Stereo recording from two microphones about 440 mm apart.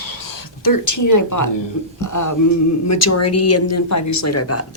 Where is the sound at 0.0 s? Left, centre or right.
Left.